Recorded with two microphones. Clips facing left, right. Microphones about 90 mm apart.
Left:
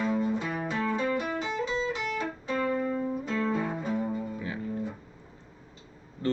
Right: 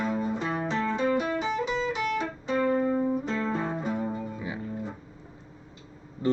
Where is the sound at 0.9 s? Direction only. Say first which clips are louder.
Right 3 dB; 20° right (ahead or behind).